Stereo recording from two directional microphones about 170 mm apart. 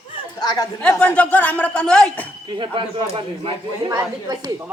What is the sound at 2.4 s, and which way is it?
Speech, 30° right (ahead or behind).